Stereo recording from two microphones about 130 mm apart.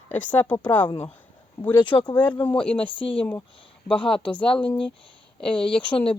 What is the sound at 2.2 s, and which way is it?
Speech, 10° left (ahead or behind).